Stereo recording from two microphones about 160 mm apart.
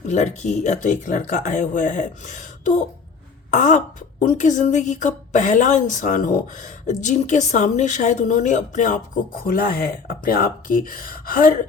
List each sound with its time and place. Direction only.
0.1 s a woman's voice: 45° left (ahead or behind); by 11.5 s 60° left (ahead or behind)